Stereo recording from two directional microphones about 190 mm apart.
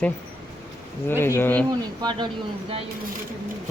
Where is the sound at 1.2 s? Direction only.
10° left (ahead or behind).